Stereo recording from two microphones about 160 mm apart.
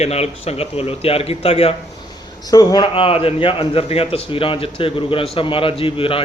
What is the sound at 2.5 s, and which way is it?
A man's voice, 25° left (ahead or behind).